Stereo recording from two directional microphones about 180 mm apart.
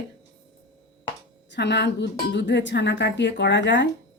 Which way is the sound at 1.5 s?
70° left (ahead or behind).